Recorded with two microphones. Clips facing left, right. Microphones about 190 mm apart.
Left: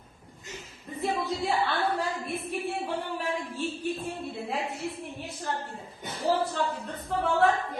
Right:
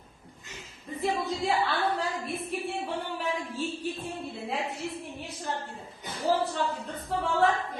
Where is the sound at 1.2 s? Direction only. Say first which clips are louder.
Even; centre (ahead or behind).